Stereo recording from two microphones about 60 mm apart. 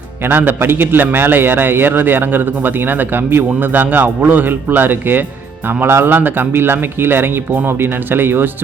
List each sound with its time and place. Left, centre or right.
0.3 s a man's voice: right